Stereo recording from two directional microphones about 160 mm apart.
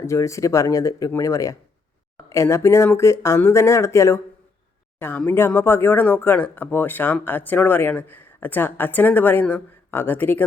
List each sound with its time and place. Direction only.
0.0 s speech: 20° left (ahead or behind)